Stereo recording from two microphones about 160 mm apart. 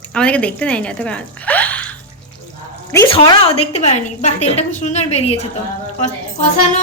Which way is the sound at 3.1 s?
35° left (ahead or behind).